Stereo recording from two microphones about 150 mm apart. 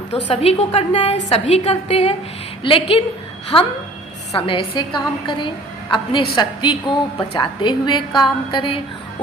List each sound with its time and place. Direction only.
0.1 s a woman's voice: 40° left (ahead or behind)
3.5 s a woman's voice: 10° left (ahead or behind)
4.4 s a woman's voice: 35° left (ahead or behind)